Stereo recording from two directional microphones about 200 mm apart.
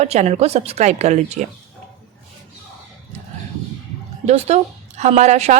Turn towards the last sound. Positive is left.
turn(degrees=-35)  # may be behind; listen again after turning